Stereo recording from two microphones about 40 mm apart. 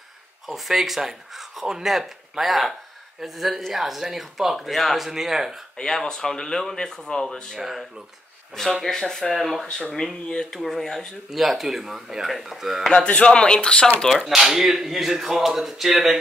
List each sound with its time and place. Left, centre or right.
0.5 s speech: centre
5.8 s speech: centre
8.8 s speech: centre
9.7 s speech: centre
10.5 s speech: centre
11.2 s speech: centre
12.9 s speech: left
14.2 s speech: centre